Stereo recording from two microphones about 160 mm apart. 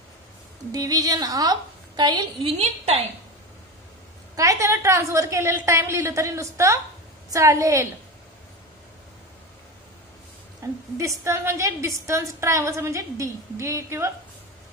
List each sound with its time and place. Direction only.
0.7 s a woman's voice: 25° right (ahead or behind)
2.5 s a woman's voice: 40° right (ahead or behind)
4.4 s a woman's voice: 20° right (ahead or behind)
11.2 s a woman's voice: 15° right (ahead or behind)